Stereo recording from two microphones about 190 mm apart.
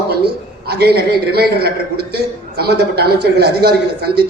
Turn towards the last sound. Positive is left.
turn(degrees=-55)  # may be behind; listen again after turning